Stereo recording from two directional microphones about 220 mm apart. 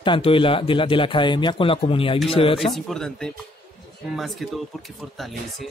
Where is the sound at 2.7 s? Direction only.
Centre (ahead or behind).